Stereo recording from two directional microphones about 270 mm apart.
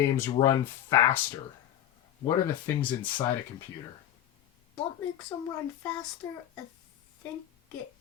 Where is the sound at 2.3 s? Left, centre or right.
Centre.